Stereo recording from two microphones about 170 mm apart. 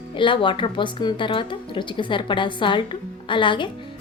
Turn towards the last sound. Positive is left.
turn(degrees=30)  # may be behind; listen again after turning